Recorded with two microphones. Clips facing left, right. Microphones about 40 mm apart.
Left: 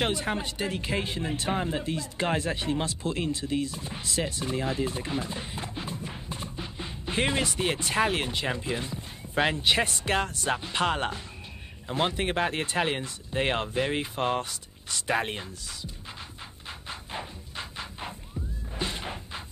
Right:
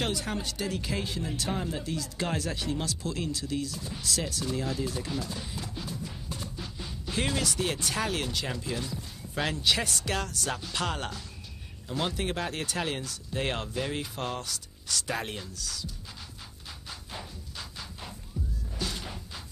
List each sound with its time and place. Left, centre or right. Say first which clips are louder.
0.0 s speech: left 3 dB; left
16.8 s a sound: left 5 dB; left
18.8 s music: left 3 dB; left